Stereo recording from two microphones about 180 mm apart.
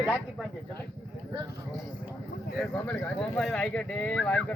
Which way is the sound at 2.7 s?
5° left (ahead or behind).